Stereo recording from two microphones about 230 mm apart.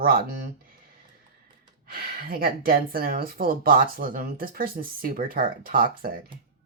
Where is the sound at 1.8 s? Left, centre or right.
Right.